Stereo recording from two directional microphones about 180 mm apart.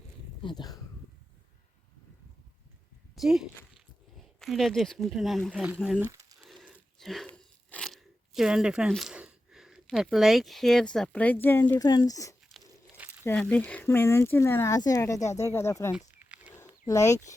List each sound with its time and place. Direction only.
0.4 s speech: 20° left (ahead or behind)
3.2 s speech: centre (ahead or behind)
6.1 s crumpling: 20° right (ahead or behind)
6.4 s a sound: centre (ahead or behind)
6.7 s crunch: centre (ahead or behind)
11.8 s speech: 20° left (ahead or behind)
16.1 s a sound: 10° right (ahead or behind)
16.8 s speech: 20° left (ahead or behind)